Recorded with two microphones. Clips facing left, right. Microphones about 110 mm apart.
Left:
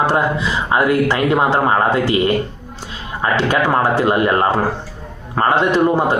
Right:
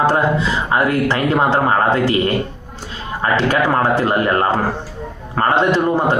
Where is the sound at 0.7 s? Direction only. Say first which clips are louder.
Left 2 dB; 15° left (ahead or behind).